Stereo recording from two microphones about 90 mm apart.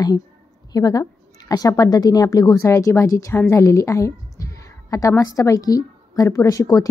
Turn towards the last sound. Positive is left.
turn(degrees=40)  # may be behind; listen again after turning